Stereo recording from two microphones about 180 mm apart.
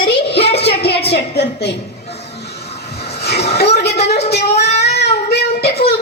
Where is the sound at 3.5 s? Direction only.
65° left (ahead or behind).